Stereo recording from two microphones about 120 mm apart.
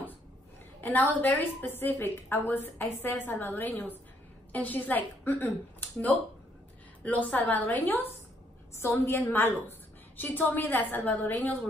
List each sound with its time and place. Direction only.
0.7 s a woman's voice: 15° left (ahead or behind)